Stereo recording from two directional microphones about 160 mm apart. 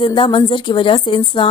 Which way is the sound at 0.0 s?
30° left (ahead or behind).